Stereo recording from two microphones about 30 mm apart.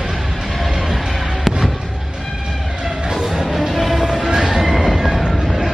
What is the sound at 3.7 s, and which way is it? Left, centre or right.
Music, centre.